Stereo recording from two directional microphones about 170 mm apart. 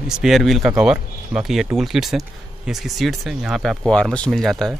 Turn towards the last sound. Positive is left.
turn(degrees=0)  # may be behind; listen again after turning